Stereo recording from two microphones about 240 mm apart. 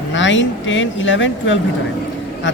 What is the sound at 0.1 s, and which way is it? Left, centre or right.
Speech, left.